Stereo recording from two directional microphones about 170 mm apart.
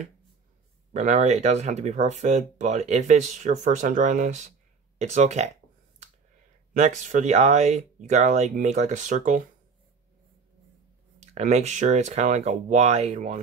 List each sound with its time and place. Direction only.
0.9 s speech: 45° right (ahead or behind)
6.8 s speech: 45° right (ahead or behind)
11.1 s speech: 40° right (ahead or behind)